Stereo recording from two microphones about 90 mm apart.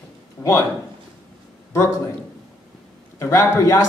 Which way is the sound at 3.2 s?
35° left (ahead or behind).